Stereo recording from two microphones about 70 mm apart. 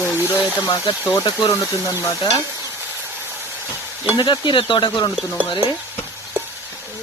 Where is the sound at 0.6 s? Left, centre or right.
Left.